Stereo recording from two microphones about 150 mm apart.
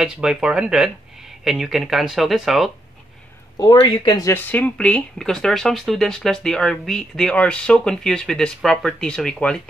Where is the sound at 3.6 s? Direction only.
30° left (ahead or behind).